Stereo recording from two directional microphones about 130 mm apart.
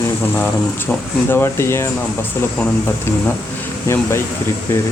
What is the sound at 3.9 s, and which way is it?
Speech, 20° left (ahead or behind).